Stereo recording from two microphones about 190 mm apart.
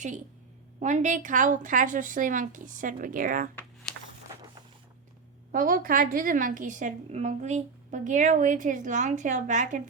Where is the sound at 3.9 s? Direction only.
5° left (ahead or behind).